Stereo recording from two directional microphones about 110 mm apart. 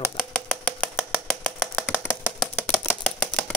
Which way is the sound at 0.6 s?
10° left (ahead or behind).